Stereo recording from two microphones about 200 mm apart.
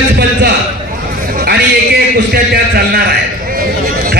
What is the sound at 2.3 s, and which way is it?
Speech, 50° right (ahead or behind).